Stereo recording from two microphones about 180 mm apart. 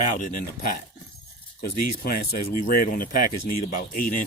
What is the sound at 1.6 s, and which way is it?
Speech, 55° left (ahead or behind).